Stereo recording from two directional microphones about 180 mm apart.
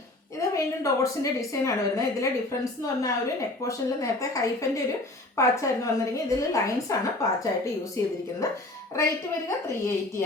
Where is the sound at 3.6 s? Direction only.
20° left (ahead or behind).